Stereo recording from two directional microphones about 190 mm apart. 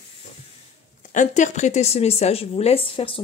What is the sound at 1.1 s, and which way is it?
Speech, 40° left (ahead or behind).